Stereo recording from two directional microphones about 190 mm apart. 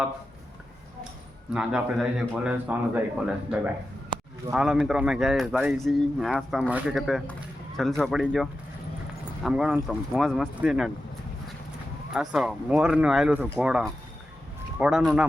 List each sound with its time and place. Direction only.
1.5 s speech: 5° right (ahead or behind)
12.1 s speech: centre (ahead or behind)